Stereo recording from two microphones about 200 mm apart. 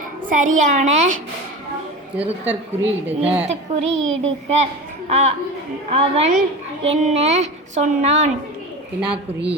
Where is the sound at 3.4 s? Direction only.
35° right (ahead or behind).